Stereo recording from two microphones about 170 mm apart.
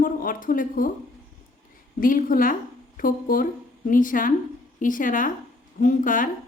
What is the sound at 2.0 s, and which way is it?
A woman's voice, 55° left (ahead or behind).